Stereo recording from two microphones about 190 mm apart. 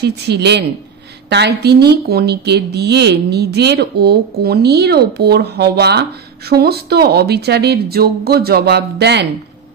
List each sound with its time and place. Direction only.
0.0 s speech: 60° right (ahead or behind)